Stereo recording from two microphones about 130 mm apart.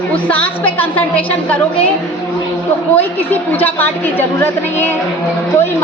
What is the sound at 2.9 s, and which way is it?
A woman's voice, 15° left (ahead or behind).